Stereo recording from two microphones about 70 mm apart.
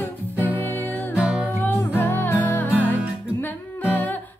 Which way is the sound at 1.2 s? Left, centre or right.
Centre.